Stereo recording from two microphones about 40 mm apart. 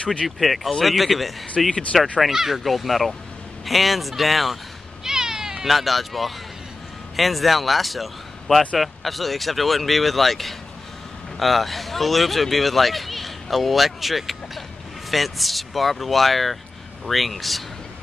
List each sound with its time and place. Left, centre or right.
0.0 s speech: left
0.4 s speech: centre
5.0 s cat: centre
7.2 s speech: centre